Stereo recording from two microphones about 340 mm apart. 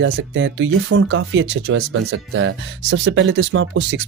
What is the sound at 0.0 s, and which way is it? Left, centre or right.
Speech, right.